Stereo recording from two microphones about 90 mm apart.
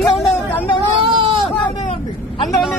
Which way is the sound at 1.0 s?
75° right (ahead or behind).